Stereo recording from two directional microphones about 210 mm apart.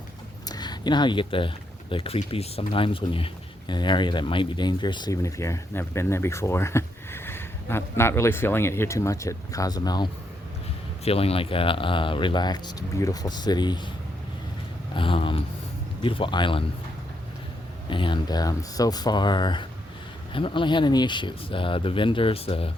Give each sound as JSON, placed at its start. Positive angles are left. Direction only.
{"t": 0.4, "sound": "speech", "side_deg": 20}
{"t": 14.9, "sound": "speech", "side_deg": 25}
{"t": 17.8, "sound": "speech", "side_deg": 25}